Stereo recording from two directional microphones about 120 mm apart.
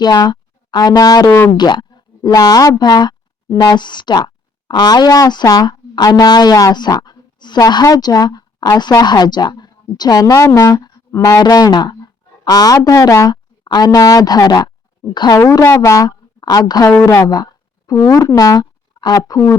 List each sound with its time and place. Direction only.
0.0 s speech: 35° left (ahead or behind)
3.8 s a woman's voice: 40° left (ahead or behind)
15.4 s a woman's voice: 20° left (ahead or behind)
16.9 s speech: 20° left (ahead or behind)
17.2 s speech: 35° left (ahead or behind)